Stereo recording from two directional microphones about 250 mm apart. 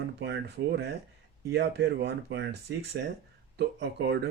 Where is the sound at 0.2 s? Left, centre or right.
Right.